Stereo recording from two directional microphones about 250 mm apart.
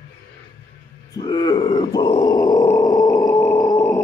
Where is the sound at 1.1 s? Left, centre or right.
Centre.